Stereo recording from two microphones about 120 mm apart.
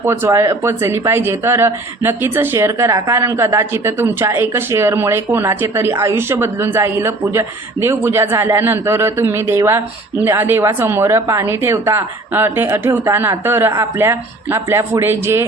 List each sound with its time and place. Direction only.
0.0 s a man's voice: 20° right (ahead or behind)